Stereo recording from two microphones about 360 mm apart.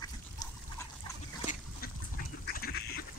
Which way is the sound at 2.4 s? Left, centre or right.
Left.